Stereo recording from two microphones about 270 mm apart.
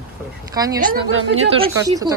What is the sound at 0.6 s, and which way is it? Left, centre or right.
A woman's voice, centre.